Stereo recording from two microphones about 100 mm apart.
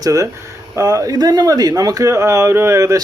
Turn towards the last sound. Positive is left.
turn(degrees=-30)  # may be behind; listen again after turning